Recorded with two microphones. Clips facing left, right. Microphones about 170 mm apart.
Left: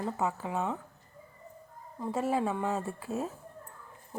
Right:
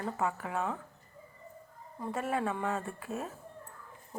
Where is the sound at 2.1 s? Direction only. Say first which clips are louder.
Left 3 dB; 25° left (ahead or behind).